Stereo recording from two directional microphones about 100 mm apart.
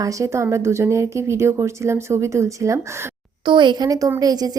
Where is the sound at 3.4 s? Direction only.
50° right (ahead or behind).